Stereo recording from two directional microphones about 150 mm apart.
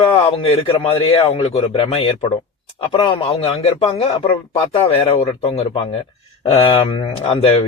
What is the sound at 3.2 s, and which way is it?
Speech, 40° left (ahead or behind).